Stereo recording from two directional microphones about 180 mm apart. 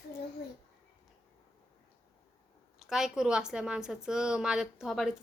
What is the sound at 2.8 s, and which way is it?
A woman's voice, centre (ahead or behind).